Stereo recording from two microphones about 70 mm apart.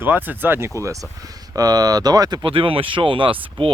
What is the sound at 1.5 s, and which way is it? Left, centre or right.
Speech, right.